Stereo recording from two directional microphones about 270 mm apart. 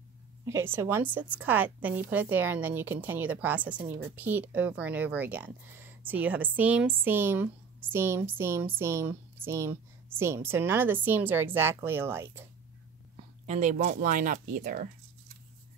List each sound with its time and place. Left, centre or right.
0.5 s speech: centre
13.1 s speech: right